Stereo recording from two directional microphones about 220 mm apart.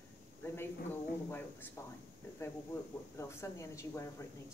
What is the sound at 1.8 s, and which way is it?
Speech, 15° left (ahead or behind).